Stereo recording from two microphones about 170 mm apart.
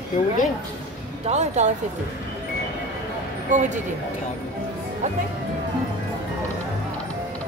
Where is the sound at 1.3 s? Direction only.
40° right (ahead or behind).